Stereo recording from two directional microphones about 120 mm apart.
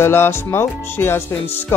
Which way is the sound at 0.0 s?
20° left (ahead or behind).